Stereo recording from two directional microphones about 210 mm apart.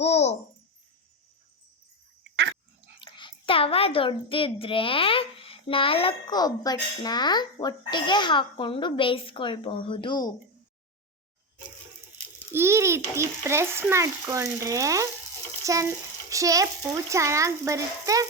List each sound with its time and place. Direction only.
0.0 s a child's voice: 30° left (ahead or behind)
2.3 s a sound: 55° right (ahead or behind)
3.0 s a child's voice: 25° left (ahead or behind)
12.5 s speech: 15° right (ahead or behind)